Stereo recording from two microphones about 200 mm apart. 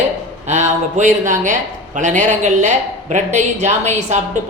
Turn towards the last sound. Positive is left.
turn(degrees=-35)  # may be behind; listen again after turning